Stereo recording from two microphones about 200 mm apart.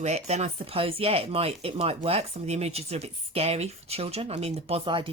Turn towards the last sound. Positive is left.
turn(degrees=-25)  # may be behind; listen again after turning